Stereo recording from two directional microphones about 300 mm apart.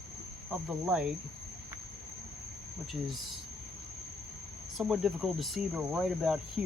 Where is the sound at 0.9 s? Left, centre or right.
Centre.